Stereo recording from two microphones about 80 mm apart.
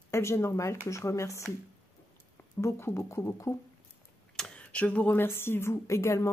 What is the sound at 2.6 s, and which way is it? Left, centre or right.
Speech, left.